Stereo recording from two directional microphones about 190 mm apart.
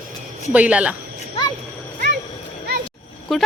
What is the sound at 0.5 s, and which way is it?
Speech, 5° right (ahead or behind).